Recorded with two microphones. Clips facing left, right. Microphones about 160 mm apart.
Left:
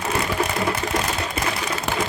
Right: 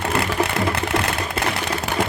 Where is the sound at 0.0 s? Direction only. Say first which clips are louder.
Right 2 dB; 65° right (ahead or behind).